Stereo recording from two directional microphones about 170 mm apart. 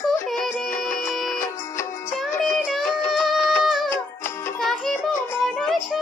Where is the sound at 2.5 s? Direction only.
Centre (ahead or behind).